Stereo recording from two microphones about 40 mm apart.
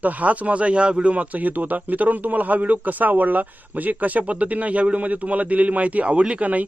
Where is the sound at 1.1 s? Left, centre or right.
Right.